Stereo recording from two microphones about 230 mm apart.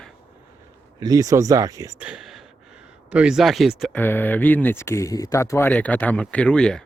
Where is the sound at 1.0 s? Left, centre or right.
Centre.